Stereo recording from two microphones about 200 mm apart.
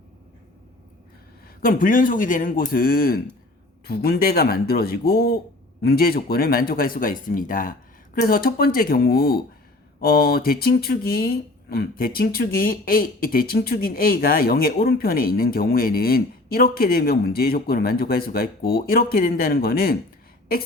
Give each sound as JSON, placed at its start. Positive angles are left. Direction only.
{"t": 1.6, "sound": "speech", "side_deg": 45}